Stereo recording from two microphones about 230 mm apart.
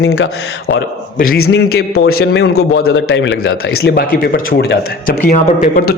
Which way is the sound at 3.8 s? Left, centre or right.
Left.